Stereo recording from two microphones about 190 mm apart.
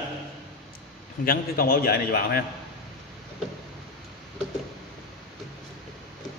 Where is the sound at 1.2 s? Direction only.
50° left (ahead or behind).